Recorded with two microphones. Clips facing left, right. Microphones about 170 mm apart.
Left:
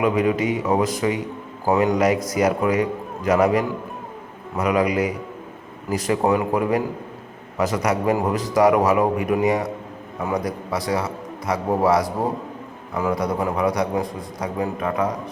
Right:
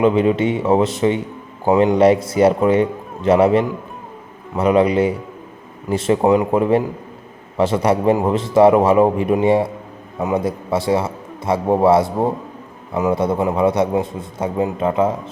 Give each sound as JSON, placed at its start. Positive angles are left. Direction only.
{"t": 0.0, "sound": "a man's voice", "side_deg": -25}